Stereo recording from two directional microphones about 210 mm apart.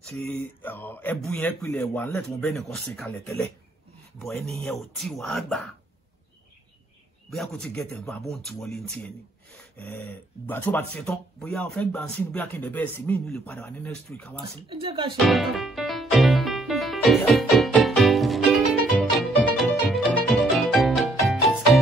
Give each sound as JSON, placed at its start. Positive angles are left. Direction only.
{"t": 0.0, "sound": "speech", "side_deg": 5}
{"t": 4.2, "sound": "speech", "side_deg": 0}
{"t": 7.5, "sound": "speech", "side_deg": 5}
{"t": 14.7, "sound": "speech", "side_deg": -25}
{"t": 15.2, "sound": "music", "side_deg": 0}